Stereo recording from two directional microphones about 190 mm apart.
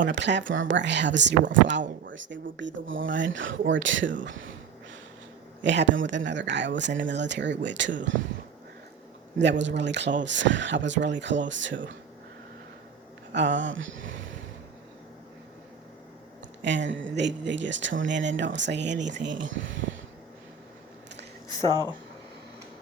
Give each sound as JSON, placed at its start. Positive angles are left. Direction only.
{"t": 0.0, "sound": "speech", "side_deg": -70}
{"t": 5.6, "sound": "speech", "side_deg": -70}
{"t": 9.4, "sound": "speech", "side_deg": -70}
{"t": 13.3, "sound": "speech", "side_deg": -70}
{"t": 16.6, "sound": "speech", "side_deg": -70}
{"t": 21.6, "sound": "speech", "side_deg": -20}